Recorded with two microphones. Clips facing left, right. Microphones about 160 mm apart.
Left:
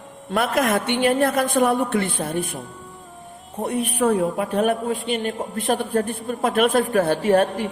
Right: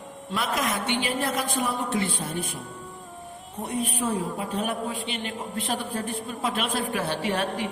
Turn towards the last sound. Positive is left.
turn(degrees=45)  # may be behind; listen again after turning